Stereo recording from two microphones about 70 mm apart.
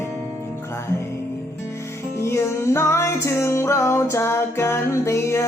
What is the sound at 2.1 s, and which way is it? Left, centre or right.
Music, left.